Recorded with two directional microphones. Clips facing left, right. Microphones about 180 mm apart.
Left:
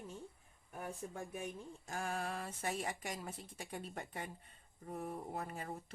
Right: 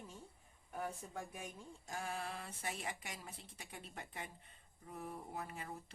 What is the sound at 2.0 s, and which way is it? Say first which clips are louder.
Speech: left 4 dB; 50° left (ahead or behind).